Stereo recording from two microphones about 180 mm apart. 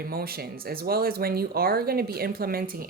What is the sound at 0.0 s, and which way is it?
Speech, 60° right (ahead or behind).